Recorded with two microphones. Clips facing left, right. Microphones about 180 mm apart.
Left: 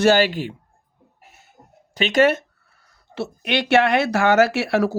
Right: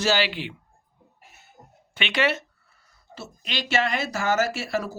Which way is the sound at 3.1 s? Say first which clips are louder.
Left 11 dB; 65° left (ahead or behind).